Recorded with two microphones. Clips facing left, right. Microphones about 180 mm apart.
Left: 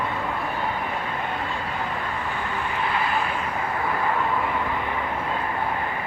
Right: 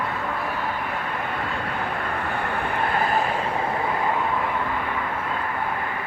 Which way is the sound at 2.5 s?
55° right (ahead or behind).